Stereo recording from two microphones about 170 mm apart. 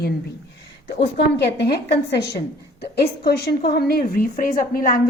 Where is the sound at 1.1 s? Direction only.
80° left.